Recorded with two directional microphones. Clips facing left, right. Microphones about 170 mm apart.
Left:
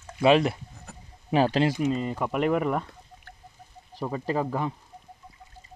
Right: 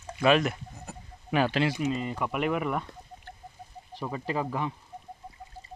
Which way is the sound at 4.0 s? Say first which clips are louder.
Left 3 dB; 35° left (ahead or behind).